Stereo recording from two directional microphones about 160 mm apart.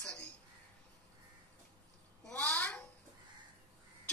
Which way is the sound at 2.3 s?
10° left (ahead or behind).